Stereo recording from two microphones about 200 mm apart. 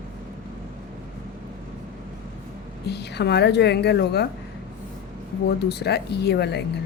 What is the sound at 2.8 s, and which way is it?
A woman's voice, 55° left (ahead or behind).